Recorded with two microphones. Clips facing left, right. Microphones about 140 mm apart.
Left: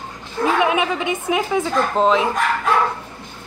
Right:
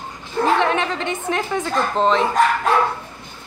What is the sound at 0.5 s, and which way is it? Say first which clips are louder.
A woman's voice: left 1 dB; 10° left (ahead or behind).